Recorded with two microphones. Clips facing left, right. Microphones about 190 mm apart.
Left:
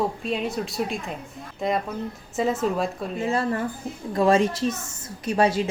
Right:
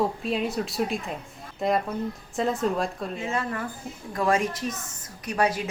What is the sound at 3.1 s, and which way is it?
A woman's voice, 35° left (ahead or behind).